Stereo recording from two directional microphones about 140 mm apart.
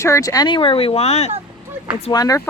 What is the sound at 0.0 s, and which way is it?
Speech, 25° left (ahead or behind).